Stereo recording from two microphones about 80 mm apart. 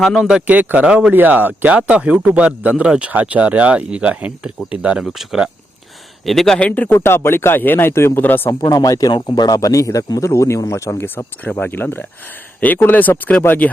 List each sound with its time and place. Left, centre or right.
0.0 s speech: centre
0.4 s speech: right; by 6.7 s centre
6.7 s speech: left
8.6 s speech: left
9.3 s speech: left